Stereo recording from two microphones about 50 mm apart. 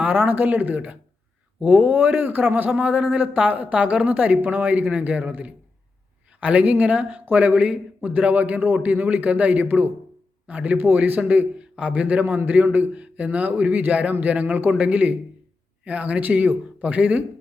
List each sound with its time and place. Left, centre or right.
0.0 s speech: right
2.6 s a man's voice: right
10.8 s speech: right
11.5 s a man's voice: right
12.6 s speech: right
12.9 s speech: right
15.8 s speech: right
16.1 s speech: right